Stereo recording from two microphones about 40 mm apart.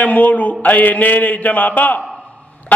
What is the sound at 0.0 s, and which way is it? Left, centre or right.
A man's voice, left.